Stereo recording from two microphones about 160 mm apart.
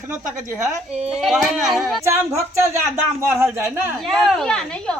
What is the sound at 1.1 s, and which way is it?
Speech, 5° right (ahead or behind).